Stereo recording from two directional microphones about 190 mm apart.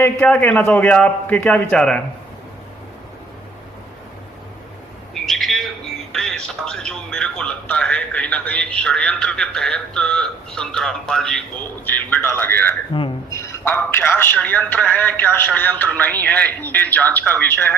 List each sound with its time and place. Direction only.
0.0 s a man's voice: 10° left (ahead or behind)
5.1 s a man's voice: centre (ahead or behind)
12.9 s speech: 25° left (ahead or behind)
13.4 s a man's voice: 15° left (ahead or behind)